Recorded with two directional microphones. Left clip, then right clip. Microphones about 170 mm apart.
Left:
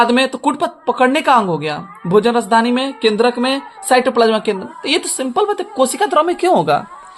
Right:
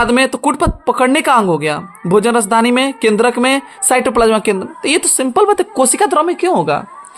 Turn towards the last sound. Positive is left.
turn(degrees=-10)  # may be behind; listen again after turning